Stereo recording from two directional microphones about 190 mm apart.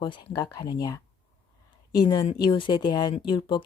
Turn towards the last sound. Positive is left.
turn(degrees=25)  # may be behind; listen again after turning